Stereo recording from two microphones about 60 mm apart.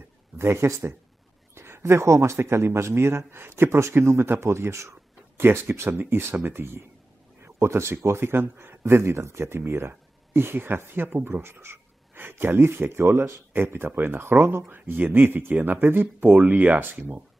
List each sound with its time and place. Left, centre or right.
0.4 s speech: right
7.4 s speech: right